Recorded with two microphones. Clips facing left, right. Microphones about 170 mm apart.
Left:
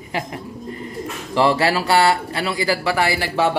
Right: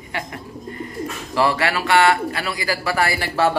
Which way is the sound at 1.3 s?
25° left (ahead or behind).